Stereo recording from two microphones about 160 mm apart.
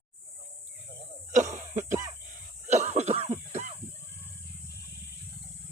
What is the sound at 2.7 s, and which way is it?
Cough, 45° right (ahead or behind).